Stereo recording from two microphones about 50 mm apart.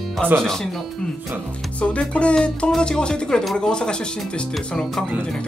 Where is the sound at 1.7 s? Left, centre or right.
Left.